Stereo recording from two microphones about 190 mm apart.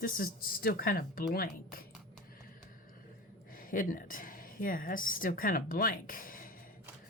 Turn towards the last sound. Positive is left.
turn(degrees=45)  # may be behind; listen again after turning